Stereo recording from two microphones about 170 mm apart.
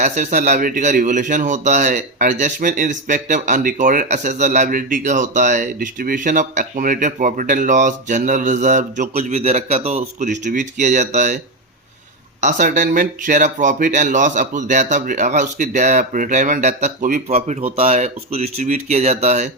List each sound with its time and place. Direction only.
0.0 s speech: 45° right (ahead or behind)
12.4 s speech: 45° right (ahead or behind)